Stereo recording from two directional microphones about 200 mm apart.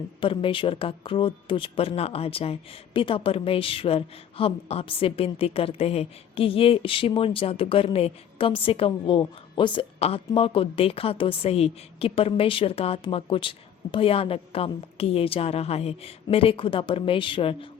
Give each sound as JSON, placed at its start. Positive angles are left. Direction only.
{"t": 0.2, "sound": "speech", "side_deg": 25}